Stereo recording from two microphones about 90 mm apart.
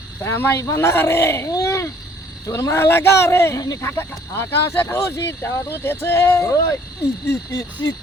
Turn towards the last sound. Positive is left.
turn(degrees=40)  # may be behind; listen again after turning